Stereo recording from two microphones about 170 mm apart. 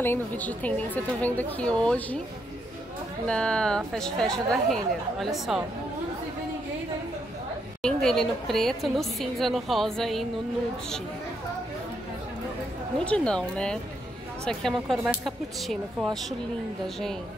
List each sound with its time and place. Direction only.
0.0 s a woman's voice: 10° left (ahead or behind)
3.3 s a woman's voice: 5° left (ahead or behind)
7.8 s a woman's voice: 5° left (ahead or behind)
13.0 s a woman's voice: 5° left (ahead or behind)